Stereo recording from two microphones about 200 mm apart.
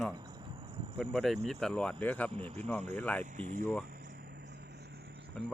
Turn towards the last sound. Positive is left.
turn(degrees=0)  # may be behind; listen again after turning